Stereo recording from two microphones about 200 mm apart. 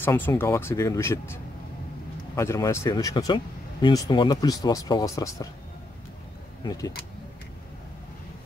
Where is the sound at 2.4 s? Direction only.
15° left (ahead or behind).